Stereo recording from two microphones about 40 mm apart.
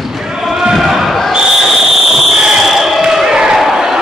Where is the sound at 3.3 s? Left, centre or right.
Centre.